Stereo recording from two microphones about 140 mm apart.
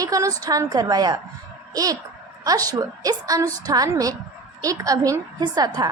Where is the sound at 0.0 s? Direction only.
25° right (ahead or behind).